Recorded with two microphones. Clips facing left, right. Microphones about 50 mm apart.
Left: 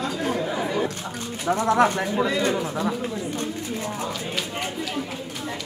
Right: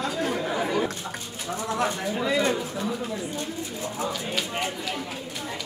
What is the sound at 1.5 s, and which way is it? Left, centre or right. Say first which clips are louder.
Speech: left 8 dB; left.